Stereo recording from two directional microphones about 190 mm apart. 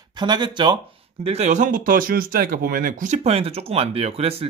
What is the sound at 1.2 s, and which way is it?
Speech, 35° right (ahead or behind).